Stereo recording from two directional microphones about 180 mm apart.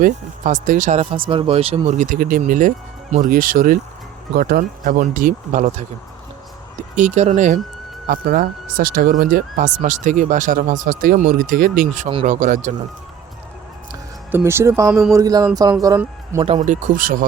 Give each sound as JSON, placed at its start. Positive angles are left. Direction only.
{"t": 0.0, "sound": "speech", "side_deg": -45}
{"t": 6.9, "sound": "speech", "side_deg": -40}
{"t": 14.3, "sound": "speech", "side_deg": -15}
{"t": 16.4, "sound": "speech", "side_deg": -40}